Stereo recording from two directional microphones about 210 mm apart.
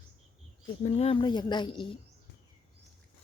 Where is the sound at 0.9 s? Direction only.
30° left (ahead or behind).